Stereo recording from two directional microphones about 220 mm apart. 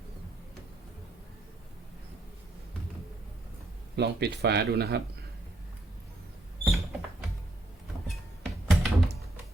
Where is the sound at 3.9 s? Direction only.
50° right (ahead or behind).